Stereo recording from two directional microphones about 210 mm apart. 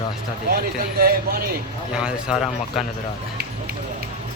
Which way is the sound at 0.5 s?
45° right (ahead or behind).